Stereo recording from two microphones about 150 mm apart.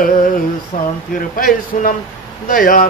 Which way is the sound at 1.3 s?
70° left (ahead or behind).